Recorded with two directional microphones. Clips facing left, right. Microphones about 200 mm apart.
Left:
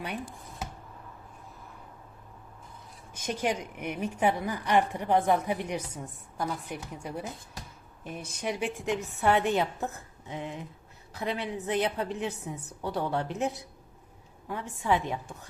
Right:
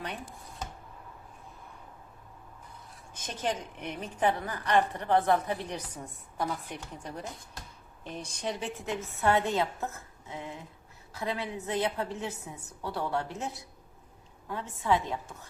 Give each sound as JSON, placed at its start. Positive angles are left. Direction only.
{"t": 3.2, "sound": "a woman's voice", "side_deg": 10}